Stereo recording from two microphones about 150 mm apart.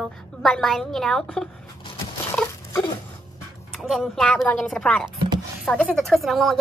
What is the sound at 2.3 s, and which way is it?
Dog, 20° left (ahead or behind).